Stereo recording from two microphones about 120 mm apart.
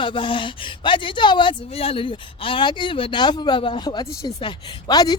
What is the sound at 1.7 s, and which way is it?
Speech, 55° left (ahead or behind).